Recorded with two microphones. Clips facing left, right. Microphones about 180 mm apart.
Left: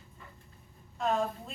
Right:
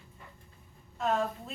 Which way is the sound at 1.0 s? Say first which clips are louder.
Even; centre (ahead or behind).